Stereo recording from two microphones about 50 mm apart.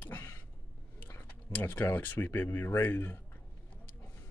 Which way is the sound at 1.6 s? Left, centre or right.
Left.